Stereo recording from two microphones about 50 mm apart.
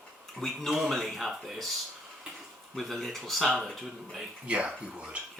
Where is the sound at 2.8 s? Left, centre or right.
Centre.